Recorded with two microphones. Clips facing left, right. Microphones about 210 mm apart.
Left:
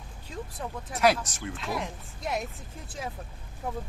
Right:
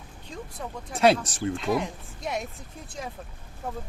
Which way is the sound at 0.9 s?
30° right (ahead or behind).